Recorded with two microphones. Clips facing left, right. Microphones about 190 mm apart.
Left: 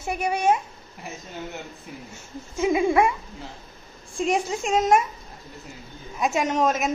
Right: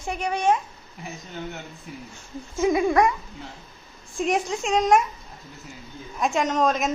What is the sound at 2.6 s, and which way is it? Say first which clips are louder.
Speech: even; 20° left (ahead or behind).